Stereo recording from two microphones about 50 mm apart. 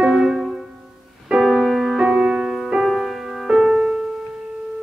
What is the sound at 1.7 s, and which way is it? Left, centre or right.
Music, centre.